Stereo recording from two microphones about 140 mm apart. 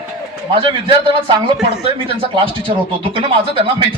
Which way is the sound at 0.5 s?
35° right (ahead or behind).